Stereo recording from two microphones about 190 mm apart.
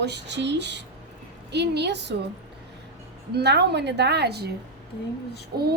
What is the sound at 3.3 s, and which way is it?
A woman's voice, 60° right (ahead or behind).